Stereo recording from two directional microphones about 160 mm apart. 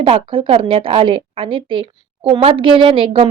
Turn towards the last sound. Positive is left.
turn(degrees=-35)  # may be behind; listen again after turning